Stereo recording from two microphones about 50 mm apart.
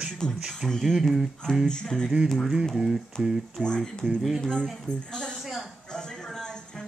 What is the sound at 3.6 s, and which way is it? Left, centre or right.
Music, centre.